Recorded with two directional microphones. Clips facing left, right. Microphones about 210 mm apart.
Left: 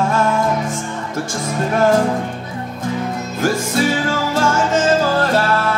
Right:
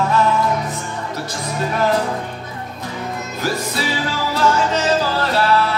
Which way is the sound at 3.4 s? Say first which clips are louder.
Left 6 dB; 50° left (ahead or behind).